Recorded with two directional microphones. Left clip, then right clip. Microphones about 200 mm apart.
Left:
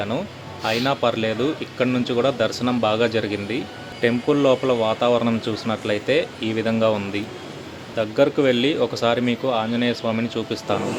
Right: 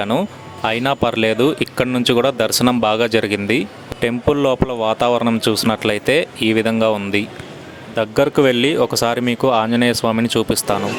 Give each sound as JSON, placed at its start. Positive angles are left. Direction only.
{"t": 0.0, "sound": "speech", "side_deg": -45}